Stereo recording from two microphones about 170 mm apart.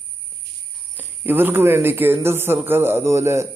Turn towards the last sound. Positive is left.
turn(degrees=-15)  # may be behind; listen again after turning